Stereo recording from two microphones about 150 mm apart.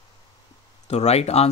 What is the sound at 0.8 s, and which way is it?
Speech, 45° left (ahead or behind).